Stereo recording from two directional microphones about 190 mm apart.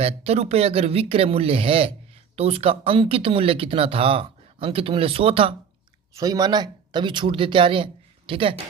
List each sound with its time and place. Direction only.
0.0 s speech: 35° right (ahead or behind)